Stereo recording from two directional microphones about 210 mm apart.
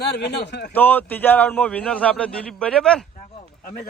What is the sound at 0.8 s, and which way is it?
A man's voice, 10° left (ahead or behind).